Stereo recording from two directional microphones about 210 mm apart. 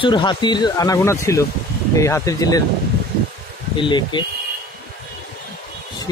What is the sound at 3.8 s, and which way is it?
Speech, 20° left (ahead or behind).